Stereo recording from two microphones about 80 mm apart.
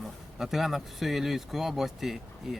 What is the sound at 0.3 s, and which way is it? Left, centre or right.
Speech, centre.